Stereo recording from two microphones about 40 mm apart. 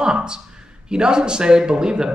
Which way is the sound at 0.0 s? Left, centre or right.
Right.